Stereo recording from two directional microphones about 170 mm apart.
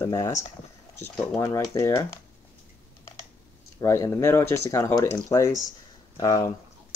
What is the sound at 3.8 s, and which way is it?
Speech, 15° left (ahead or behind).